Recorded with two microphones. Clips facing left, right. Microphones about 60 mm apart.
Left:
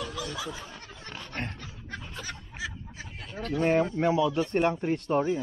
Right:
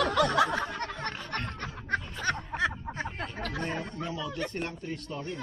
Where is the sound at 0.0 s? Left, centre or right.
Right.